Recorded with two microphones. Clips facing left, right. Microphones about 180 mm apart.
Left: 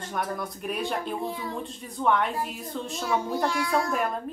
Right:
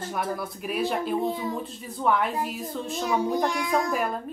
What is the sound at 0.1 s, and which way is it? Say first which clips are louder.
A child's voice: even; 5° right (ahead or behind).